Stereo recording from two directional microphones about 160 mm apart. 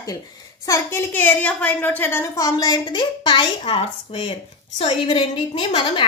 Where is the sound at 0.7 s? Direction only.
15° left (ahead or behind).